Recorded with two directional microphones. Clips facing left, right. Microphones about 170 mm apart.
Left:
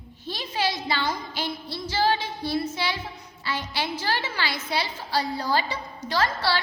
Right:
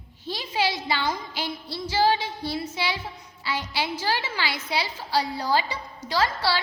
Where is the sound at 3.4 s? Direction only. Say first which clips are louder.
Right 1 dB; 10° right (ahead or behind).